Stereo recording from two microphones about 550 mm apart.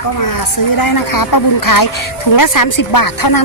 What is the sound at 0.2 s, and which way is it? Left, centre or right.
A woman's voice, left.